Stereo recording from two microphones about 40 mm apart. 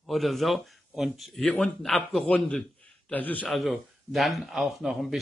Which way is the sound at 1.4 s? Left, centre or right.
Left.